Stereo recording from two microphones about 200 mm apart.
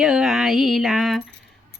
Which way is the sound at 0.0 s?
Centre (ahead or behind).